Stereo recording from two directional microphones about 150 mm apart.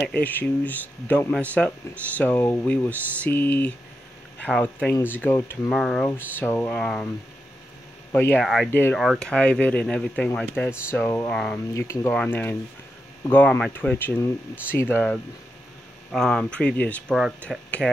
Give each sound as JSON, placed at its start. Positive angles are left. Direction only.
{"t": 0.1, "sound": "speech", "side_deg": 10}
{"t": 6.0, "sound": "speech", "side_deg": 15}
{"t": 6.8, "sound": "speech", "side_deg": 5}
{"t": 8.1, "sound": "speech", "side_deg": 15}
{"t": 8.4, "sound": "speech", "side_deg": 5}
{"t": 8.6, "sound": "speech", "side_deg": 15}
{"t": 8.9, "sound": "speech", "side_deg": 0}
{"t": 11.7, "sound": "speech", "side_deg": 20}